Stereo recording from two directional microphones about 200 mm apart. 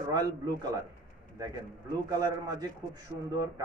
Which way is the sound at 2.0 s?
20° right (ahead or behind).